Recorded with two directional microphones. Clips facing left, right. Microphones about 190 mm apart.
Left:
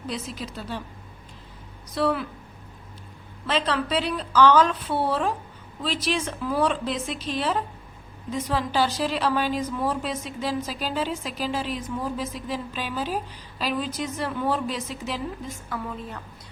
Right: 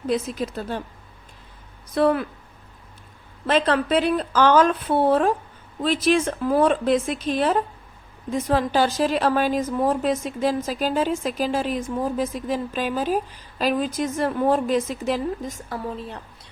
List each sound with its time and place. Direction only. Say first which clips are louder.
0.1 s a woman's voice: right 10 dB; 50° right (ahead or behind)
2.0 s a woman's voice: right 5 dB; 50° right (ahead or behind)
3.4 s a woman's voice: right 5 dB; 50° right (ahead or behind)